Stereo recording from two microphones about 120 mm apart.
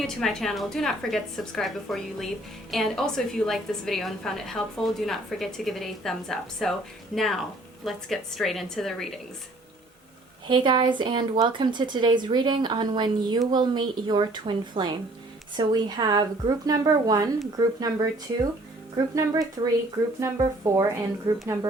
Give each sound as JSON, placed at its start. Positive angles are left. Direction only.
{"t": 0.2, "sound": "a woman's voice", "side_deg": 0}
{"t": 10.5, "sound": "speech", "side_deg": -40}